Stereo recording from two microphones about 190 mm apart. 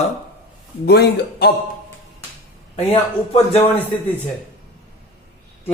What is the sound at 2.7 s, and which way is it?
Speech, 30° left (ahead or behind).